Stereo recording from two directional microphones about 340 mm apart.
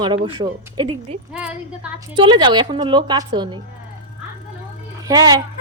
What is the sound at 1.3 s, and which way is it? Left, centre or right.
Speech, centre.